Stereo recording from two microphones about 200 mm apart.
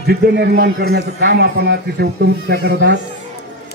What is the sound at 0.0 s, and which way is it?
A man's voice, 55° right (ahead or behind).